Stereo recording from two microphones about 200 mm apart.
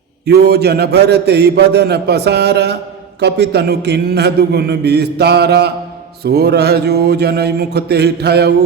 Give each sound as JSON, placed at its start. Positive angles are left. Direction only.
{"t": 0.3, "sound": "a man's voice", "side_deg": -55}